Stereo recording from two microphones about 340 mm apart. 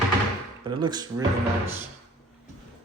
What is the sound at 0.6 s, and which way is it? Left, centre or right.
Speech, centre.